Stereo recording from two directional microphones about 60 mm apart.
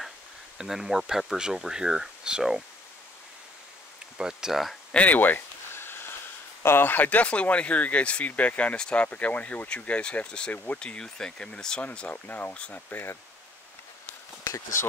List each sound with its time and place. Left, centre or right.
0.6 s speech: centre
4.2 s speech: centre
4.9 s a sound: left
6.6 s speech: left; by 10.5 s centre
10.5 s speech: left
10.8 s speech: centre
12.1 s speech: left
14.4 s speech: left